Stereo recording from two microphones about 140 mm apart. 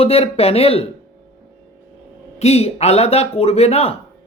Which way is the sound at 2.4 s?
50° left (ahead or behind).